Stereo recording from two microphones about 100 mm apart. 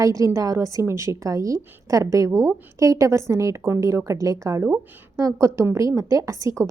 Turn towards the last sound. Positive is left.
turn(degrees=-30)  # may be behind; listen again after turning